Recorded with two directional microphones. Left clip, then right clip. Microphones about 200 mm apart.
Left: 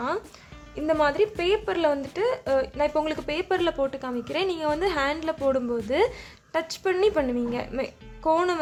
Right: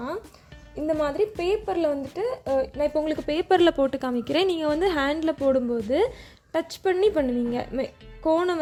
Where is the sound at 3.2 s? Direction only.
30° right (ahead or behind).